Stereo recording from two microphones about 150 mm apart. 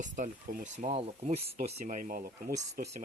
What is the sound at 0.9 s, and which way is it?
Speech, 40° right (ahead or behind).